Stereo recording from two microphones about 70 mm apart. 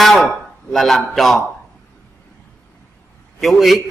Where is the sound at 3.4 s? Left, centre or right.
Centre.